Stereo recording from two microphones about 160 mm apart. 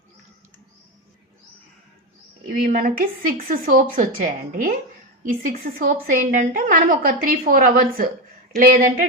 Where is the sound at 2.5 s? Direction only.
65° right (ahead or behind).